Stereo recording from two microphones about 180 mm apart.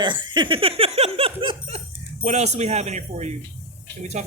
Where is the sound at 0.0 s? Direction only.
25° right (ahead or behind).